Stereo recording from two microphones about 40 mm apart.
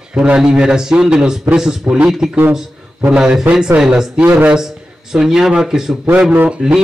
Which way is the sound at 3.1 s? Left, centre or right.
Centre.